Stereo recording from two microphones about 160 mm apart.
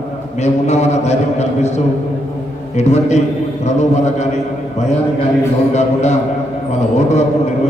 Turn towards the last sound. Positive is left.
turn(degrees=45)  # may be behind; listen again after turning